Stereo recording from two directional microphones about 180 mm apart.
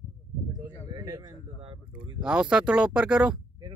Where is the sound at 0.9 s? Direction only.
20° right (ahead or behind).